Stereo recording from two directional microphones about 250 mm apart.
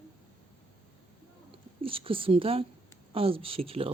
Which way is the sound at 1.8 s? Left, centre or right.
Right.